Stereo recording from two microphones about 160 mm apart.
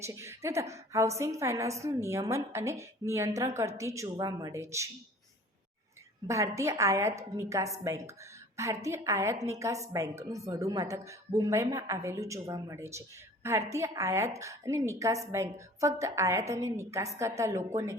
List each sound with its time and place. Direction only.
0.0 s a woman's voice: 15° right (ahead or behind)
6.2 s a woman's voice: 20° right (ahead or behind)